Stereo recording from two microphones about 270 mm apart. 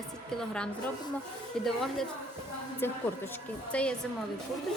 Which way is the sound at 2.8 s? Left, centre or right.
Centre.